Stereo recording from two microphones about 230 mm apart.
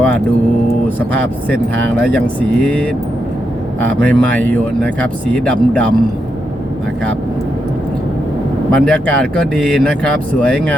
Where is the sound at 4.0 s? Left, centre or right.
Centre.